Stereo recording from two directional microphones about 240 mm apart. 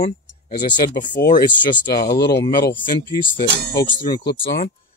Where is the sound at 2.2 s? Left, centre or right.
Left.